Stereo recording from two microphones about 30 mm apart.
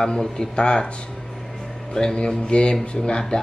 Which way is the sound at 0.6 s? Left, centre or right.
Left.